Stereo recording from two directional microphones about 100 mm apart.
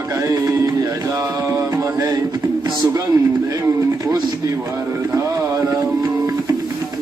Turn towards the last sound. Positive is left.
turn(degrees=-35)  # may be behind; listen again after turning